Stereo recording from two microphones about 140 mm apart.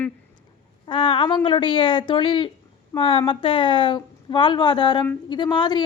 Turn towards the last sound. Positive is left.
turn(degrees=30)  # may be behind; listen again after turning